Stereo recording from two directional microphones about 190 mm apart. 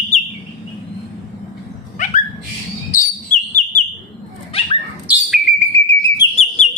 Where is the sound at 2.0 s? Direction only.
40° left (ahead or behind).